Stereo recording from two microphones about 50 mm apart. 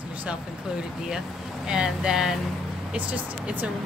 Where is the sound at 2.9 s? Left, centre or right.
Right.